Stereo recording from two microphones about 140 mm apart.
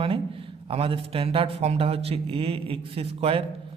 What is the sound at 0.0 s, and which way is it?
A man's voice, 40° right (ahead or behind).